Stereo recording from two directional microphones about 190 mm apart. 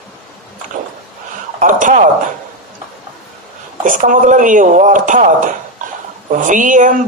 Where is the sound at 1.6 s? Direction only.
45° right (ahead or behind).